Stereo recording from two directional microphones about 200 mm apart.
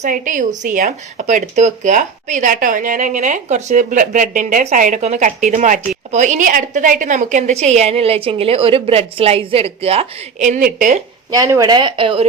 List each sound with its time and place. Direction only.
0.0 s a woman's voice: 40° right (ahead or behind)
11.3 s speech: 15° right (ahead or behind)